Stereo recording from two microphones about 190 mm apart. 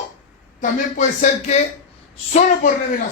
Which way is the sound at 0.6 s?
40° left (ahead or behind).